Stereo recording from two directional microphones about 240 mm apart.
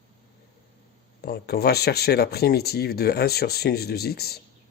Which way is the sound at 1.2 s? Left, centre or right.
Left.